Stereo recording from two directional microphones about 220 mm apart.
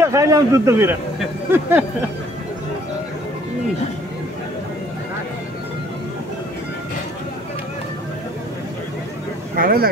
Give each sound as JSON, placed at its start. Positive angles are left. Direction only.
{"t": 0.0, "sound": "a man's voice", "side_deg": -15}
{"t": 9.6, "sound": "speech", "side_deg": -45}